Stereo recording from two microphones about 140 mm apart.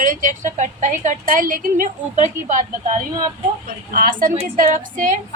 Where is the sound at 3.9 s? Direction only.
80° right.